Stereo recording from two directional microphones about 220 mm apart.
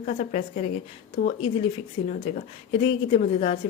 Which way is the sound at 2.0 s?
35° left (ahead or behind).